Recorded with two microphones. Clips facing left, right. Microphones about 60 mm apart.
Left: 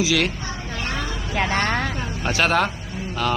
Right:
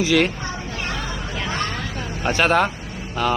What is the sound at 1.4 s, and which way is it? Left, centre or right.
Vehicle, left.